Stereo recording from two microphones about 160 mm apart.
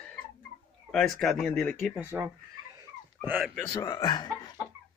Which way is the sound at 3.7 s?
25° left (ahead or behind).